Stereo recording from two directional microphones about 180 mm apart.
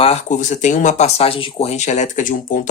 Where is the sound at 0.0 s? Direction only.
40° left (ahead or behind).